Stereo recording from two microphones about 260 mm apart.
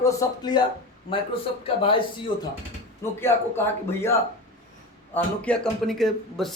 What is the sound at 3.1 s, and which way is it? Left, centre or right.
Speech, centre.